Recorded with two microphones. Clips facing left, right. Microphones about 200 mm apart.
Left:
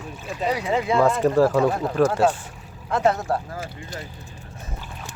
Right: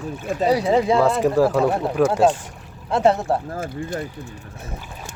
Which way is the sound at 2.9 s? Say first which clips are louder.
Right 3 dB; 30° right (ahead or behind).